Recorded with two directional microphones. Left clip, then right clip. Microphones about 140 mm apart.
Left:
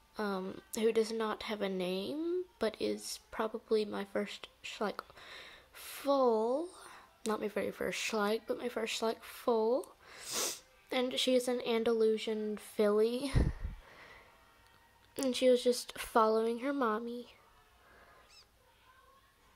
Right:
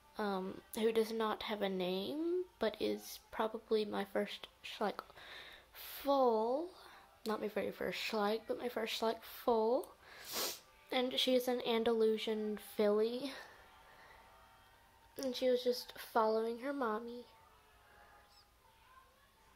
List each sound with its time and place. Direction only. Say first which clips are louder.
0.1 s a woman's voice: left 2 dB; 15° left (ahead or behind)
13.2 s a child's voice: left 7 dB; 30° left (ahead or behind)
15.1 s speech: left 6 dB; 35° left (ahead or behind)